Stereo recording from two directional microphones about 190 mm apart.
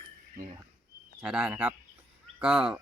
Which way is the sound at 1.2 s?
5° right (ahead or behind).